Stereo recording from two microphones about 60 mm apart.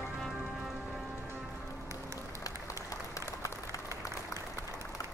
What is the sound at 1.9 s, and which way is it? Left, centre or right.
Music, right.